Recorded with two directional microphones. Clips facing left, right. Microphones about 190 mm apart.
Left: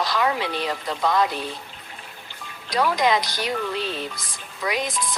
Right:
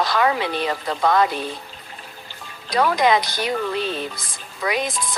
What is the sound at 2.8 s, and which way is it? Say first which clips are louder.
Speech: right 3 dB; 55° right (ahead or behind).